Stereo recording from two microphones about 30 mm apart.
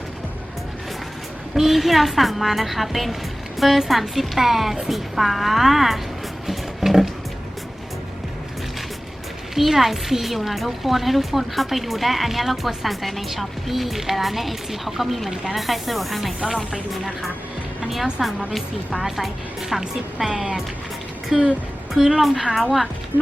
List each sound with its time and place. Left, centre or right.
1.5 s a woman's voice: centre
6.5 s a sound: centre
9.6 s a woman's voice: centre
17.8 s a woman's voice: centre
22.2 s a woman's voice: centre